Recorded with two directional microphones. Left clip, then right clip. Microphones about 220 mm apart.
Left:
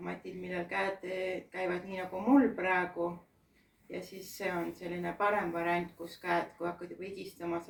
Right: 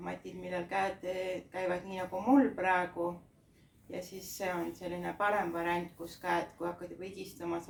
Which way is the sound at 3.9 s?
20° right (ahead or behind).